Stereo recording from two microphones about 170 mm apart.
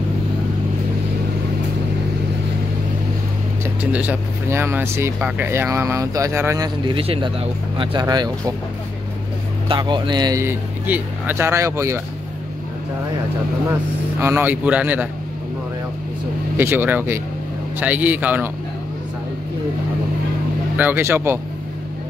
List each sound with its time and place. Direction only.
3.8 s speech: 10° right (ahead or behind); by 8.3 s 25° right (ahead or behind)
9.7 s speech: 25° right (ahead or behind)
10.4 s speech: 10° right (ahead or behind)
14.2 s speech: 10° right (ahead or behind)
16.5 s speech: 10° right (ahead or behind)
20.7 s speech: 10° right (ahead or behind)